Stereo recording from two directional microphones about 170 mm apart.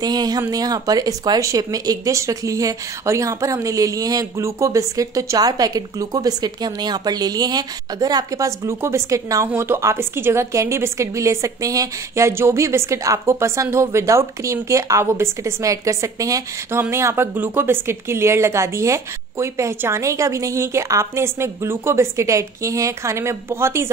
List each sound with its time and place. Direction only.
0.0 s a woman's voice: 25° right (ahead or behind)